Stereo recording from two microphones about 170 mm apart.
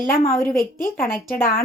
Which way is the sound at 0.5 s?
55° left (ahead or behind).